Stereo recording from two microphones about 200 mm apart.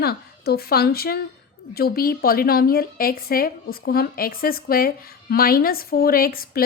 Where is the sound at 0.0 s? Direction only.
50° left (ahead or behind).